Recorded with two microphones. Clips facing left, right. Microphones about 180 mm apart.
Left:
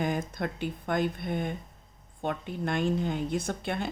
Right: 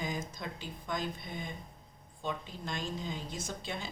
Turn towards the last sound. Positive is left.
turn(degrees=60)  # may be behind; listen again after turning